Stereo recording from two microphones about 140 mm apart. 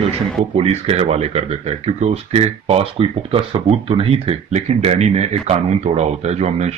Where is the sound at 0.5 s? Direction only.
45° right (ahead or behind).